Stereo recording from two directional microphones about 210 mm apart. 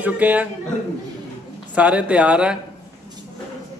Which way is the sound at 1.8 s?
5° right (ahead or behind).